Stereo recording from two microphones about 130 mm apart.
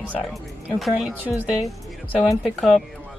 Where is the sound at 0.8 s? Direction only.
5° right (ahead or behind).